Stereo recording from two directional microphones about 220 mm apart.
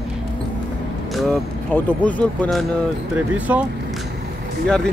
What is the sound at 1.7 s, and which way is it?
Speech, 5° left (ahead or behind).